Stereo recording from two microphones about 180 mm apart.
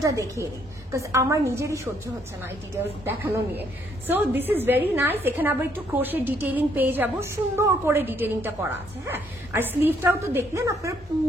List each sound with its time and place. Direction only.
0.0 s a woman's voice: 15° right (ahead or behind)
3.1 s a woman's voice: 10° right (ahead or behind)